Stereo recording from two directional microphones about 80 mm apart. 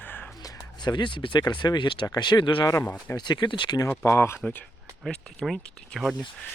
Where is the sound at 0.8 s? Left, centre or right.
Left.